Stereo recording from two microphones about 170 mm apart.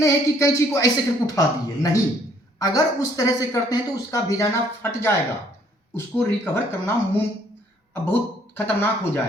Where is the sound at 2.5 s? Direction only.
20° left (ahead or behind).